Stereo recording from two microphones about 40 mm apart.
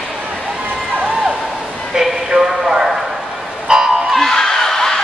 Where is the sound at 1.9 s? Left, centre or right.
Centre.